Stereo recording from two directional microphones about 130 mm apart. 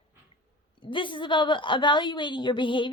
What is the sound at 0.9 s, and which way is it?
A woman's voice, 40° left (ahead or behind).